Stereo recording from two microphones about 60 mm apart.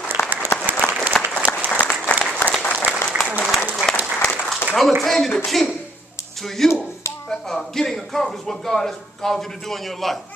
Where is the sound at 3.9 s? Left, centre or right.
Centre.